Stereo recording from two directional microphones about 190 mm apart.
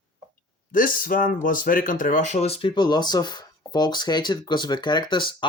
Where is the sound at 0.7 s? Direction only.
45° left (ahead or behind); by 5.5 s 25° left (ahead or behind).